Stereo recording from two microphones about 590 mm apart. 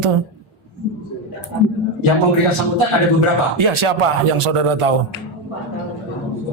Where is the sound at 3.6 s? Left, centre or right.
Right.